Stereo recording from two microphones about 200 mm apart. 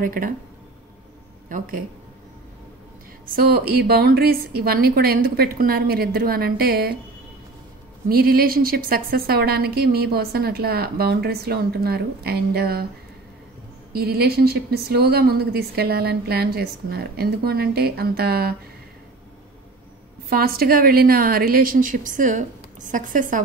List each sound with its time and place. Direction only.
0.0 s a woman's voice: 45° right (ahead or behind)
1.5 s a woman's voice: 45° right (ahead or behind)
3.3 s a woman's voice: 50° right (ahead or behind)
8.1 s a woman's voice: 50° right (ahead or behind)
13.9 s a woman's voice: 50° right (ahead or behind)
20.2 s a woman's voice: 50° right (ahead or behind)